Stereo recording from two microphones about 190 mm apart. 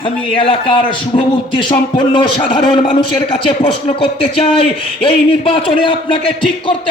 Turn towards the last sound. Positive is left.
turn(degrees=25)  # may be behind; listen again after turning